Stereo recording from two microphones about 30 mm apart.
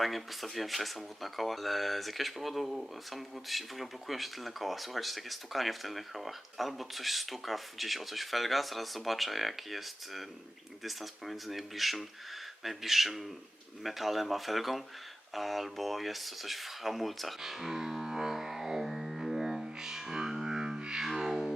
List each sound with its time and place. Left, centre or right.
0.0 s speech: centre
17.4 s music: centre
20.6 s music: right
21.0 s music: centre